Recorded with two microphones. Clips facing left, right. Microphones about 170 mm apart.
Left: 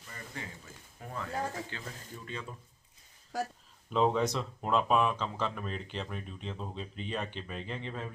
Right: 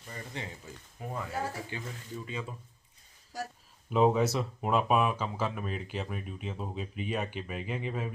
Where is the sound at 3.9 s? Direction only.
10° right (ahead or behind).